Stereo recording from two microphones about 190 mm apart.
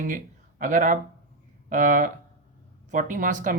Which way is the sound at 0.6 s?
45° right (ahead or behind).